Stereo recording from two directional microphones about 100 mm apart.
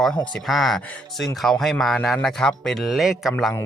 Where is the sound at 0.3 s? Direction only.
Centre (ahead or behind).